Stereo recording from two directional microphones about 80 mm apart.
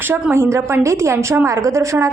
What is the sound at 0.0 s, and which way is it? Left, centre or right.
A woman's voice, right.